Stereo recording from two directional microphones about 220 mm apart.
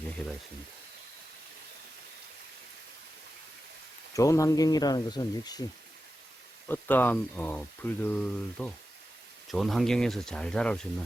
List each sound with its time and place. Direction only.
0.2 s speech: 5° left (ahead or behind)
4.1 s speech: 15° left (ahead or behind)
6.7 s speech: 10° left (ahead or behind)